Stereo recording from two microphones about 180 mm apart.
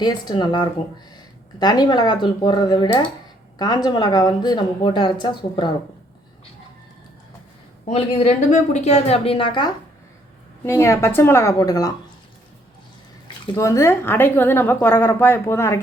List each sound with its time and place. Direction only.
0.0 s speech: 25° left (ahead or behind)
7.9 s a woman's voice: 35° left (ahead or behind)
10.7 s a woman's voice: 15° left (ahead or behind)
13.6 s a woman's voice: 15° left (ahead or behind)